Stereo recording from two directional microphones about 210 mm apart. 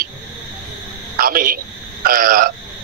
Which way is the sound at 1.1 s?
45° right (ahead or behind).